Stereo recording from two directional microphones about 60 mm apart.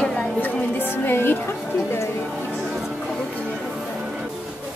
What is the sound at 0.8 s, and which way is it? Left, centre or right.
Music, left.